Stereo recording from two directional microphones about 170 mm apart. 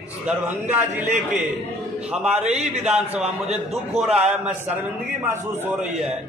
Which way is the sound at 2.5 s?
40° right (ahead or behind).